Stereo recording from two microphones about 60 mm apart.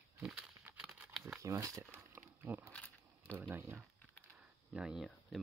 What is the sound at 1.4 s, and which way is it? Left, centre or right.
Speech, right.